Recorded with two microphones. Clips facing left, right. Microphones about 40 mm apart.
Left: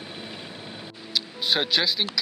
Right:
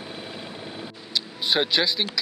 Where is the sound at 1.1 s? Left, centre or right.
Centre.